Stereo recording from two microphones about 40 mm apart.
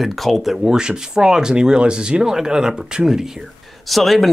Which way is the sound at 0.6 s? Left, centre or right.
Centre.